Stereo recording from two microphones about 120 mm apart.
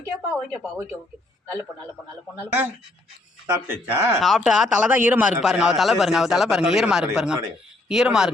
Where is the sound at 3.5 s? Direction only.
20° right (ahead or behind).